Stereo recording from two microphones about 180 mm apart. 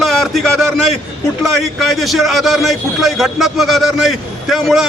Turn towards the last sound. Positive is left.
turn(degrees=0)  # may be behind; listen again after turning